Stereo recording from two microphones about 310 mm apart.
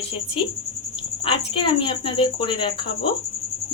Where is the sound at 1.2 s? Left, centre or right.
Centre.